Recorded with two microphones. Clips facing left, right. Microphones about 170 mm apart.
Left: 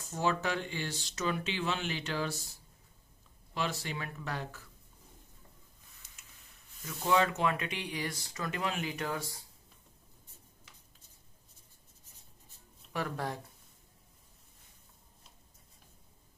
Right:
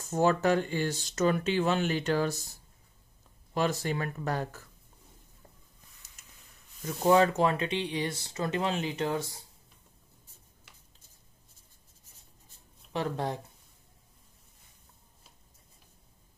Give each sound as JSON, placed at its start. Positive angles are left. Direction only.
{"t": 0.1, "sound": "speech", "side_deg": -45}
{"t": 3.5, "sound": "speech", "side_deg": -45}
{"t": 6.9, "sound": "speech", "side_deg": -45}
{"t": 12.9, "sound": "speech", "side_deg": -25}